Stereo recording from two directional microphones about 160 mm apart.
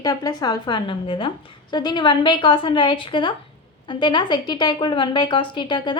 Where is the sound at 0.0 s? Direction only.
25° left (ahead or behind).